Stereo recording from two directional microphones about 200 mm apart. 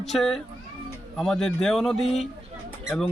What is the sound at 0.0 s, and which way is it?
A man's voice, centre (ahead or behind).